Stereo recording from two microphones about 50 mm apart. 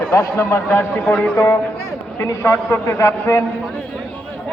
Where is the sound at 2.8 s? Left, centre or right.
Left.